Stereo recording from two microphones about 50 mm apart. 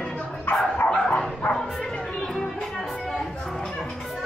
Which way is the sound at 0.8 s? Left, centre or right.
Centre.